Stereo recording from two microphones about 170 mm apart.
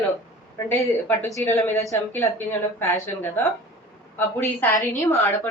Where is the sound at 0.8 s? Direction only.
Centre (ahead or behind).